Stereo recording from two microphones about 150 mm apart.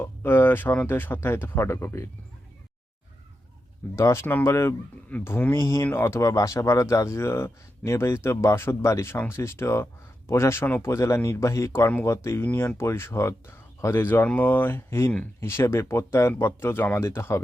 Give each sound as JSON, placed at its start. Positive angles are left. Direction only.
{"t": 0.0, "sound": "speech", "side_deg": 15}
{"t": 3.9, "sound": "speech", "side_deg": 20}